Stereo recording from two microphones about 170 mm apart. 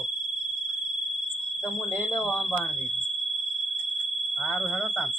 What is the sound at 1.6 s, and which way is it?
Speech, 5° left (ahead or behind).